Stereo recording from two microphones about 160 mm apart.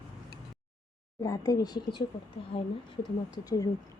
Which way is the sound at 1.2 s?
20° left (ahead or behind).